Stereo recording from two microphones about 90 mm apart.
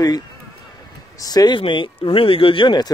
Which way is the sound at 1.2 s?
45° left (ahead or behind).